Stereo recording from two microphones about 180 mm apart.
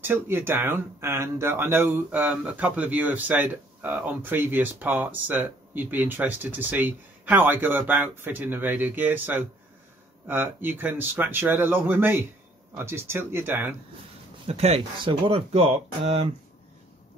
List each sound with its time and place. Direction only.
0.0 s speech: 10° right (ahead or behind)
14.5 s speech: 35° right (ahead or behind)